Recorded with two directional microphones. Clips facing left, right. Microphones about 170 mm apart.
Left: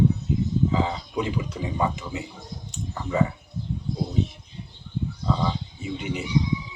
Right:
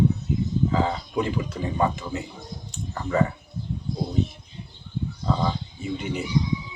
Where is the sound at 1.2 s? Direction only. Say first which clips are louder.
Right 1 dB; 15° left (ahead or behind).